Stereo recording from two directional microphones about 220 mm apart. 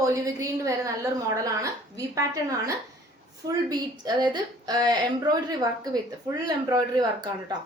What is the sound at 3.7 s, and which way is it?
A woman's voice, 20° right (ahead or behind).